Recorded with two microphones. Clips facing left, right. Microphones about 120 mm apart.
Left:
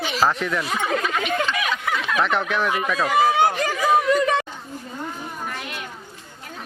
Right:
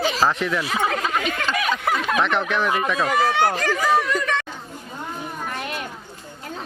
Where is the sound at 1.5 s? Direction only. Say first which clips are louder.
Right 2 dB; 40° right (ahead or behind).